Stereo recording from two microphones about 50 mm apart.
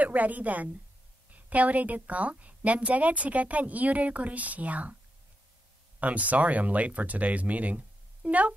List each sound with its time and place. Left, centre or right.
0.0 s a woman's voice: right
5.9 s a woman's voice: right